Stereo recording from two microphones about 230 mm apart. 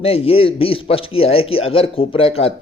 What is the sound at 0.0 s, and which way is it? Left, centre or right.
A man's voice, left.